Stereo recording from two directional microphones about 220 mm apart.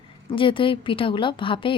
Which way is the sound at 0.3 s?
25° left (ahead or behind).